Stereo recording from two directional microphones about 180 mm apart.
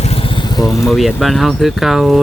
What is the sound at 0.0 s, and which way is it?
Vehicle, 35° left (ahead or behind).